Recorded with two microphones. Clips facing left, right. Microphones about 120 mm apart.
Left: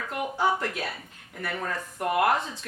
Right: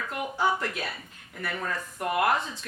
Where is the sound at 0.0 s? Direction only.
45° left (ahead or behind).